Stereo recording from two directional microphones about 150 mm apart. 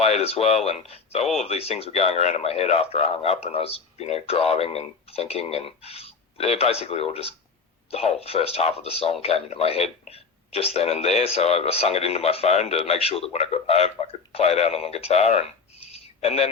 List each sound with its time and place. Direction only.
0.0 s speech: 45° left (ahead or behind)